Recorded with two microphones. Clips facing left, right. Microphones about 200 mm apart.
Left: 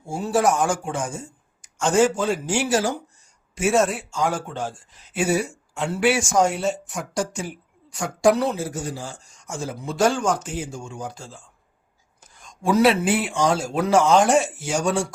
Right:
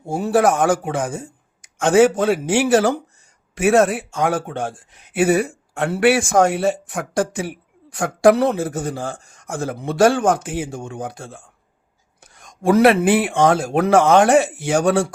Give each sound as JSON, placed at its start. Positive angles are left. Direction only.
{"t": 0.1, "sound": "speech", "side_deg": -60}